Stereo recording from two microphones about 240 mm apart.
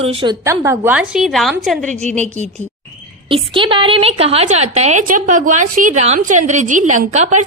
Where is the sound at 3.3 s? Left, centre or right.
Right.